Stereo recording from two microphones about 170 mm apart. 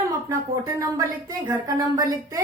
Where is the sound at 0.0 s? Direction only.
20° right (ahead or behind).